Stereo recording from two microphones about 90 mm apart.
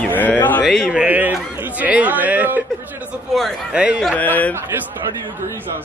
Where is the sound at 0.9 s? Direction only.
15° right (ahead or behind).